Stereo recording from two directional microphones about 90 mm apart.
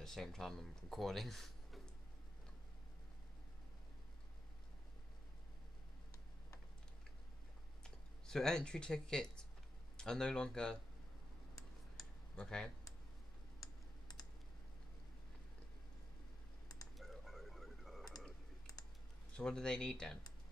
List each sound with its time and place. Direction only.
0.0 s speech: 5° left (ahead or behind)
7.8 s speech: 5° left (ahead or behind)
12.4 s speech: 5° left (ahead or behind)
13.6 s typing: 45° left (ahead or behind)
16.9 s frog: centre (ahead or behind)
18.7 s typing: 40° left (ahead or behind)
19.3 s speech: 10° left (ahead or behind)